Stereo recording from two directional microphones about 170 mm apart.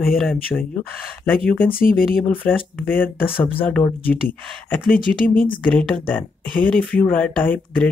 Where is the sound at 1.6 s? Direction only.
60° left (ahead or behind).